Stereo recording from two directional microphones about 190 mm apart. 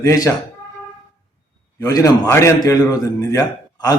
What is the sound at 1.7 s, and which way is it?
A man's voice, 15° left (ahead or behind).